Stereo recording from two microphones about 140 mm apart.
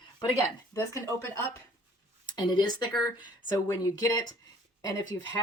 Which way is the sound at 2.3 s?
30° left (ahead or behind).